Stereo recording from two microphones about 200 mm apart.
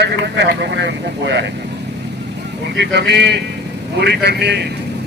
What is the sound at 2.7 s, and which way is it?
Speech, 60° right (ahead or behind).